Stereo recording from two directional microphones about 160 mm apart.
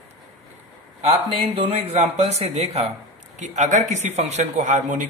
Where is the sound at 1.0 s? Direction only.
40° right (ahead or behind).